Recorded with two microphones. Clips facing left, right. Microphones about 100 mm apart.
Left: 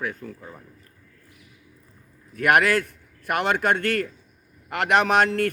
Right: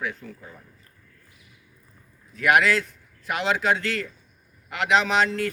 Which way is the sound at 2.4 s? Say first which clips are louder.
Left 1 dB; 50° left (ahead or behind).